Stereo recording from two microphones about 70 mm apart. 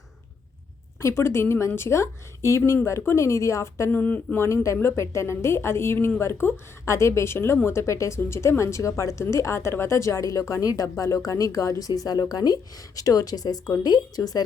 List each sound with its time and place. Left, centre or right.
1.0 s speech: left
3.8 s speech: left
4.4 s speech: left
6.8 s speech: left
13.0 s speech: left